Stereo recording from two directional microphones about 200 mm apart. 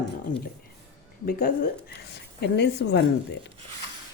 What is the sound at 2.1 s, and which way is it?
Speech, 60° left (ahead or behind).